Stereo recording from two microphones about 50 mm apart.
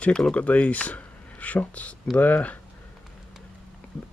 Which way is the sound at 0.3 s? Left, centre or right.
Left.